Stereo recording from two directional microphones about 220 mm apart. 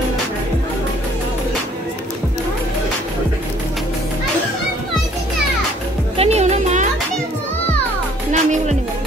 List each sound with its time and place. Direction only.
6.1 s music: 30° right (ahead or behind)
8.3 s music: 35° right (ahead or behind)